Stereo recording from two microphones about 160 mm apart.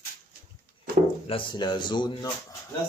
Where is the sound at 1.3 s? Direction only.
30° left (ahead or behind).